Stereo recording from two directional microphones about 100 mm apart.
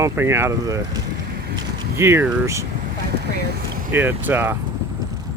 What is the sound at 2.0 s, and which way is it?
Speech, 25° right (ahead or behind).